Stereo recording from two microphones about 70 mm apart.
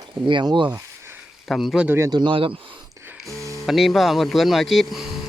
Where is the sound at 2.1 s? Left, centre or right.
Right.